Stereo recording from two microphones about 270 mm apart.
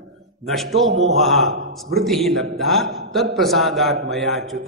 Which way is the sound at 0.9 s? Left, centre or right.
Right.